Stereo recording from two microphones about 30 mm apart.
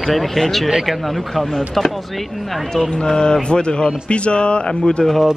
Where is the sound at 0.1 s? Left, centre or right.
Centre.